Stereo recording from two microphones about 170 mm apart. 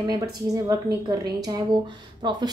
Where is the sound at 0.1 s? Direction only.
20° right (ahead or behind).